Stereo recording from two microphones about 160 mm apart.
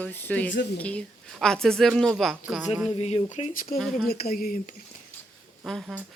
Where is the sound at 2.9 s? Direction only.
40° left (ahead or behind).